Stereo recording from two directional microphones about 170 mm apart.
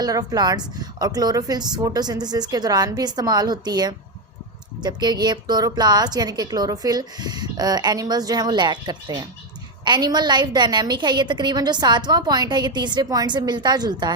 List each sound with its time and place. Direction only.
0.0 s a woman's voice: 20° right (ahead or behind)